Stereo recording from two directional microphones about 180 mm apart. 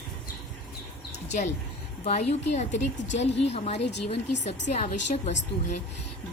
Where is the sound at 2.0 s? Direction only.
35° left (ahead or behind).